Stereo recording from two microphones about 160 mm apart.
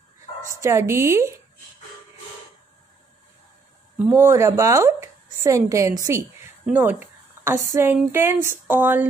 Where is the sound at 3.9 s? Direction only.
10° right (ahead or behind).